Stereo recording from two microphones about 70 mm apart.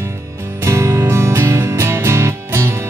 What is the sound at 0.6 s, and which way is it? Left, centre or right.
Music, right.